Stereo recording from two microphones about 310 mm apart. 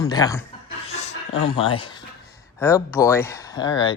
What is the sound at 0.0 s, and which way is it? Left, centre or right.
Speech, centre.